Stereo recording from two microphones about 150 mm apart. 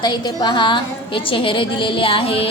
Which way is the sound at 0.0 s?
30° left (ahead or behind).